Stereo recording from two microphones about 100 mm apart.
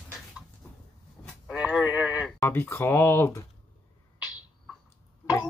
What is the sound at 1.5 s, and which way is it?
Speech, 10° right (ahead or behind).